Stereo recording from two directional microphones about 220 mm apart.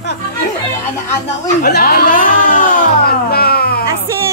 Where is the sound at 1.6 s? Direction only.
45° left (ahead or behind).